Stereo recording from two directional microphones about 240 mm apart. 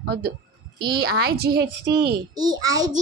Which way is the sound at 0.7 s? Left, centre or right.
Right.